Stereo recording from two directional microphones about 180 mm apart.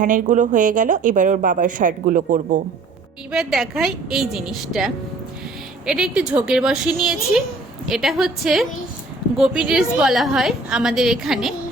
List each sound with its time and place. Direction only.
0.0 s a woman's voice: 45° right (ahead or behind)
3.3 s a woman's voice: centre (ahead or behind)